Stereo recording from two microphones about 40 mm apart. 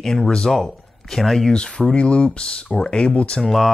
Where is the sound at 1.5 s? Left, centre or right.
Left.